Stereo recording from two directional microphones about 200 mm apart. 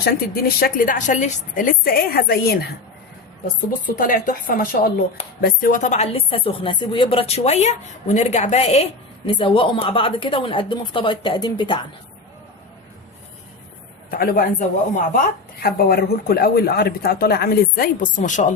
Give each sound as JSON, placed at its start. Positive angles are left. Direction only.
{"t": 0.0, "sound": "speech", "side_deg": 50}
{"t": 3.8, "sound": "a woman's voice", "side_deg": 45}
{"t": 14.1, "sound": "speech", "side_deg": 45}
{"t": 15.6, "sound": "speech", "side_deg": 50}